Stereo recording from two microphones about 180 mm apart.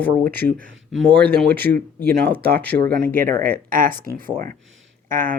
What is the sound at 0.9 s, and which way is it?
Speech, 85° right.